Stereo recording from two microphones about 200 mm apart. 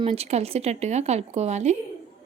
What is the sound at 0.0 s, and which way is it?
Speech, 30° right (ahead or behind).